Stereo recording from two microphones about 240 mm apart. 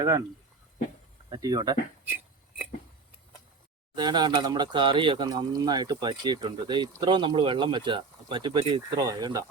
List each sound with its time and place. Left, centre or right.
0.0 s speech: centre
1.3 s speech: centre
3.9 s speech: centre